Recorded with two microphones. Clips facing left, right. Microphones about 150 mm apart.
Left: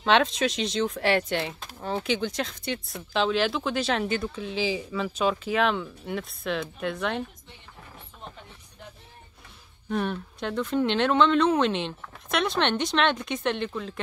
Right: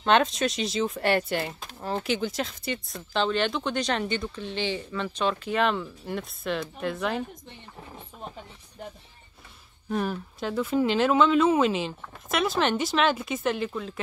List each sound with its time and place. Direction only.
0.0 s speech: centre (ahead or behind)
9.8 s speech: 5° right (ahead or behind)